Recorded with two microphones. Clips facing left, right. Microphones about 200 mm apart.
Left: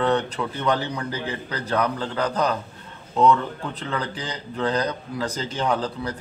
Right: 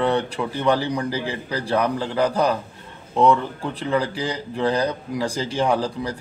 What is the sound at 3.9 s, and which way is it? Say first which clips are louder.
Speech: right 8 dB; 10° right (ahead or behind).